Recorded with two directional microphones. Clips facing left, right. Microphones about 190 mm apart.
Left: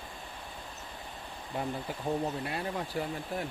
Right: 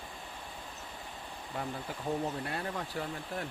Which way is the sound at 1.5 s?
20° left (ahead or behind).